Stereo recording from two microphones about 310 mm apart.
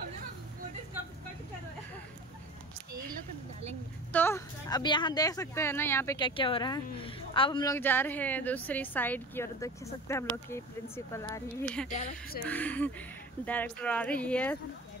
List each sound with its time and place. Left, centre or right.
4.1 s speech: centre
11.9 s speech: left
12.4 s speech: centre